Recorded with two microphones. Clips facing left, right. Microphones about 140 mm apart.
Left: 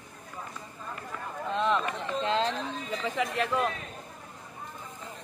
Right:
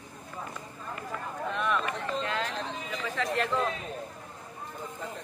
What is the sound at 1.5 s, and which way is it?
Speech, 25° left (ahead or behind).